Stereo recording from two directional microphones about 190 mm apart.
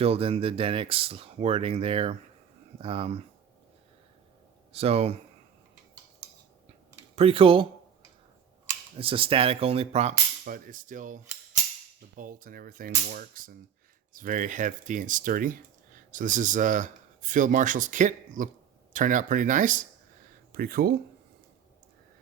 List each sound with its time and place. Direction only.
0.0 s speech: 30° right (ahead or behind)
4.7 s speech: 30° right (ahead or behind)
7.2 s speech: 30° right (ahead or behind)
9.0 s speech: 30° right (ahead or behind); by 20.9 s 50° right (ahead or behind)